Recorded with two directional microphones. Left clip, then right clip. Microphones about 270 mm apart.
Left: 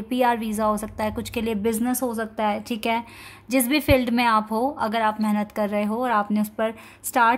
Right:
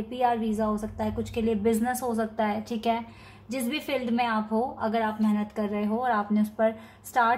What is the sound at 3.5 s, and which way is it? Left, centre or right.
A woman's voice, left.